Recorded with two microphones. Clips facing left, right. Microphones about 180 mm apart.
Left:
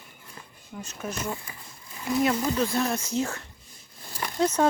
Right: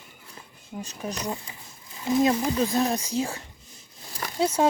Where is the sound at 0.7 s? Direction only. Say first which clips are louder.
Right 3 dB; 35° right (ahead or behind).